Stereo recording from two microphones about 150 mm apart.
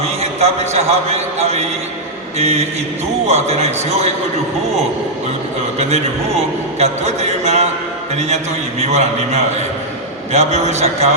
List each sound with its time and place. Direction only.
0.0 s a man's voice: 45° right (ahead or behind)
5.8 s a man's voice: 45° right (ahead or behind)
8.8 s a man's voice: 45° right (ahead or behind)